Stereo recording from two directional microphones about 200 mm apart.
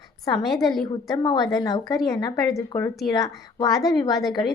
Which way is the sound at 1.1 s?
20° left (ahead or behind).